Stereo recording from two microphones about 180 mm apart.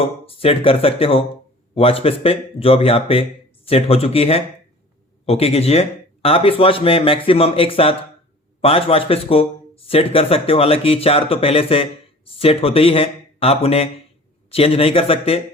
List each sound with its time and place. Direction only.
0.0 s speech: 30° left (ahead or behind)